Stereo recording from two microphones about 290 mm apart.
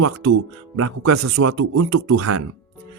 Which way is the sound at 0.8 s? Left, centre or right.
Right.